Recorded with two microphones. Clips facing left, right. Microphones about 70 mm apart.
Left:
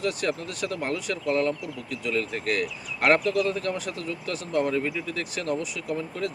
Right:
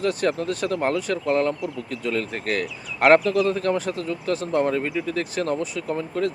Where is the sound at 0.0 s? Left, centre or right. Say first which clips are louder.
Right 5 dB; right.